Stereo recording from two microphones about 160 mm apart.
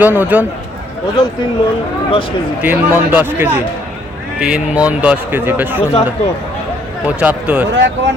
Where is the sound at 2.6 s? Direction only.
10° right (ahead or behind).